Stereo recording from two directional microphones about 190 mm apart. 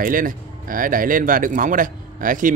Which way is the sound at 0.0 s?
45° right (ahead or behind).